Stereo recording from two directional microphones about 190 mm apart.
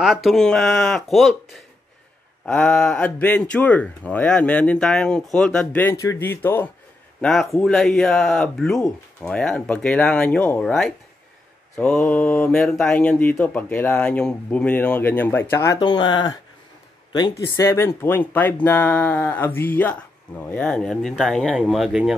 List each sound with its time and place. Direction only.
0.0 s speech: centre (ahead or behind); by 16.3 s 25° left (ahead or behind)
17.6 s speech: 15° left (ahead or behind)